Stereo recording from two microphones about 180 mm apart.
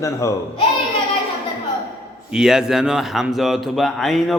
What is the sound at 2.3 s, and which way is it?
A man's voice, 5° right (ahead or behind).